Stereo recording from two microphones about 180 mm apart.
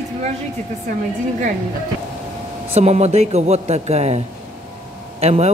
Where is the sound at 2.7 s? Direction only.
35° right (ahead or behind).